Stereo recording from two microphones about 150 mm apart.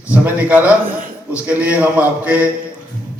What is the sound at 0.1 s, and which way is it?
A man's voice, 10° right (ahead or behind).